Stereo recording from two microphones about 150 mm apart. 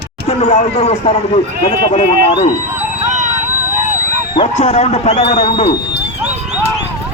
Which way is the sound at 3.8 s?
50° right (ahead or behind).